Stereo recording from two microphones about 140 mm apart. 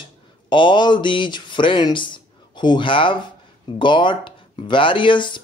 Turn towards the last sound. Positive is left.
turn(degrees=35)  # may be behind; listen again after turning